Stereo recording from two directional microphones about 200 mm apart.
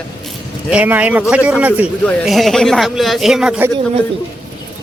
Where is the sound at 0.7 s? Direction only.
5° right (ahead or behind).